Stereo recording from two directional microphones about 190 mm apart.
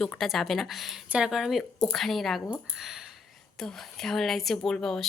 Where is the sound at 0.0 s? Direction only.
Centre (ahead or behind).